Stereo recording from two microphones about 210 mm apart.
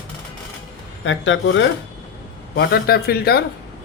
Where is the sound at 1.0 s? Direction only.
65° left (ahead or behind).